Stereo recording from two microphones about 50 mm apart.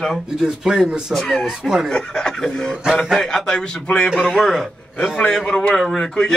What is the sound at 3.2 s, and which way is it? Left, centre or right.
A man's voice, centre.